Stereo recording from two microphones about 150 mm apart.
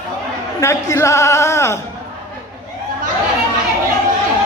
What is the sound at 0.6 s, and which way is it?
A man's voice, 20° left (ahead or behind).